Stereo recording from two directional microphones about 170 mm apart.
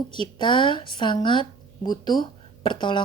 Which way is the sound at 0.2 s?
30° left (ahead or behind).